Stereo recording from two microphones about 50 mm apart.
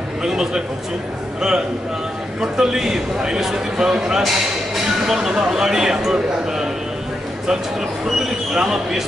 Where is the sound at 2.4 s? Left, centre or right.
Centre.